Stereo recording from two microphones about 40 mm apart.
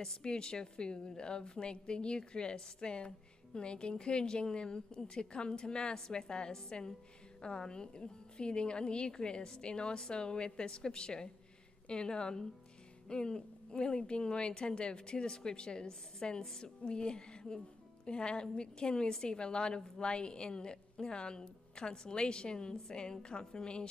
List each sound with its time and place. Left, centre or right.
0.0 s a woman's voice: centre